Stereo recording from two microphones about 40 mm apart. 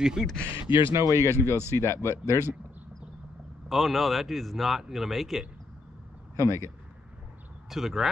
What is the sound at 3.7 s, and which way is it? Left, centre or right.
Speech, centre.